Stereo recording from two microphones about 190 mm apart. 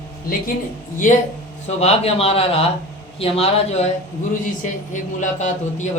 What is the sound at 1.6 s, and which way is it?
A man's voice, 35° left (ahead or behind).